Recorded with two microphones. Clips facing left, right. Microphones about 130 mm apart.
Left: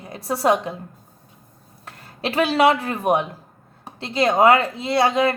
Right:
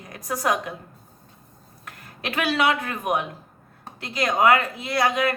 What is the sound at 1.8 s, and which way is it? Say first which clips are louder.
A woman's voice: left 5 dB; 30° left (ahead or behind).